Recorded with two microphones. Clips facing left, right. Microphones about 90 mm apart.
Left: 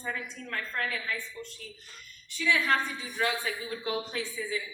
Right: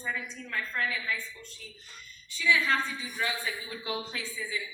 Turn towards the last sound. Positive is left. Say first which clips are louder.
# left 3 dB
turn(degrees=45)  # may be behind; listen again after turning